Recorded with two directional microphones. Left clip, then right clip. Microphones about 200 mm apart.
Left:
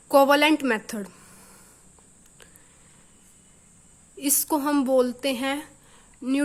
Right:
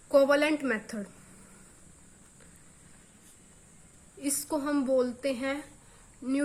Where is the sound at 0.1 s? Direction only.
50° left (ahead or behind).